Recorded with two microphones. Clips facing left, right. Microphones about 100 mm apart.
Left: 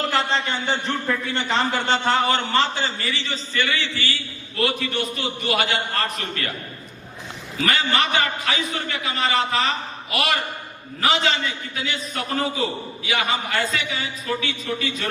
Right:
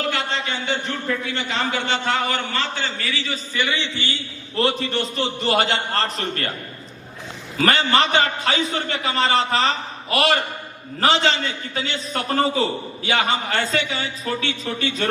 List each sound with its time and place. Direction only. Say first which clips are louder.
0.1 s a sound: left 2 dB; 40° left (ahead or behind)
1.3 s a man's voice: left 2 dB; 35° left (ahead or behind)
2.5 s a man's voice: left 4 dB; 20° left (ahead or behind)
3.0 s a man's voice: right 1 dB; centre (ahead or behind)
3.5 s a man's voice: even; 15° right (ahead or behind); by 6.5 s 35° right (ahead or behind)
7.7 s a man's voice: right 3 dB; 30° right (ahead or behind)